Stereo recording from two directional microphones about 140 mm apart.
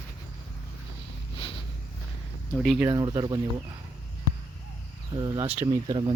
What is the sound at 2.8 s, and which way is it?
Speech, 30° right (ahead or behind).